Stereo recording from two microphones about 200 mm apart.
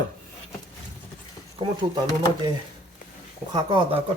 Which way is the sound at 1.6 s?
25° right (ahead or behind).